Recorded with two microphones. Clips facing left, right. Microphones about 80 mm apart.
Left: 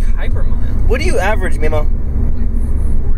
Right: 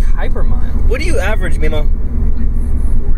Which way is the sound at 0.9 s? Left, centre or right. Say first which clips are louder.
Left 3 dB; centre.